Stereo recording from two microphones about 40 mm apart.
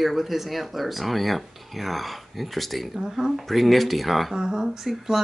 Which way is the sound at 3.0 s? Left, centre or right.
Centre.